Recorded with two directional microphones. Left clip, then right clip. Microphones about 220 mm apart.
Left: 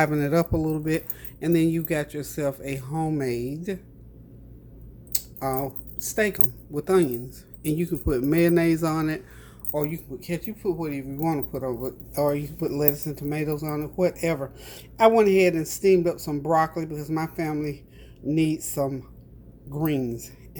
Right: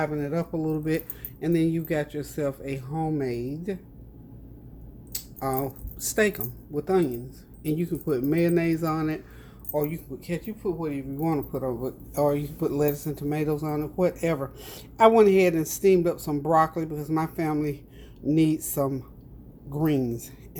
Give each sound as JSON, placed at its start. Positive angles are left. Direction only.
{"t": 0.0, "sound": "speech", "side_deg": 35}
{"t": 0.5, "sound": "speech", "side_deg": 15}
{"t": 5.1, "sound": "speech", "side_deg": 10}
{"t": 6.4, "sound": "a man's voice", "side_deg": 15}